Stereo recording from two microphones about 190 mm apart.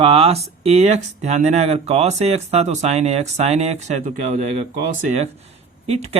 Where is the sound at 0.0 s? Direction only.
30° right (ahead or behind).